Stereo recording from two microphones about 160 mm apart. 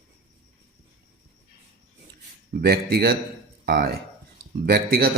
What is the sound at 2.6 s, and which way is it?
Speech, 85° right.